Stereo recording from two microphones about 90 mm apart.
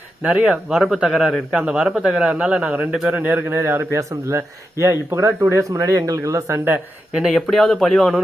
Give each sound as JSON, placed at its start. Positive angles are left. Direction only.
{"t": 0.2, "sound": "a man's voice", "side_deg": -10}
{"t": 3.2, "sound": "a man's voice", "side_deg": -20}
{"t": 3.6, "sound": "speech", "side_deg": -30}
{"t": 7.2, "sound": "speech", "side_deg": 0}